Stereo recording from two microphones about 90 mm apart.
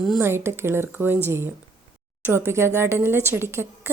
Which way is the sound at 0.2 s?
25° right (ahead or behind).